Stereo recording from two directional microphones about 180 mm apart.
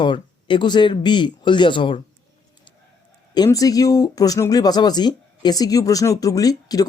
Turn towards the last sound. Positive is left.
turn(degrees=20)  # may be behind; listen again after turning